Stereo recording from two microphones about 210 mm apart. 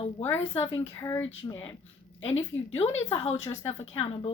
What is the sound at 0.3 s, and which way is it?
Speech, 30° left (ahead or behind).